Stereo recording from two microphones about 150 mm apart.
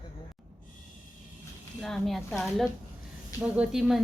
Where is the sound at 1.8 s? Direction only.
Centre (ahead or behind).